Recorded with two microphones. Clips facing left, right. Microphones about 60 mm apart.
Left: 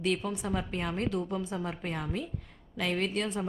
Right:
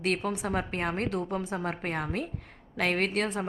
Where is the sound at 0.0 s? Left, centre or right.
Right.